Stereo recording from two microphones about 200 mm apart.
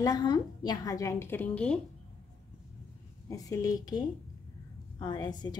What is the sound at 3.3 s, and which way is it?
A woman's voice, 15° left (ahead or behind).